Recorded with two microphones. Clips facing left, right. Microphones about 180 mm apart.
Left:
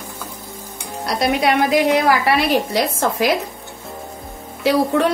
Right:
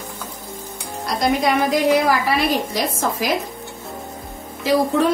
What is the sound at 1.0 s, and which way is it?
A woman's voice, 70° left (ahead or behind).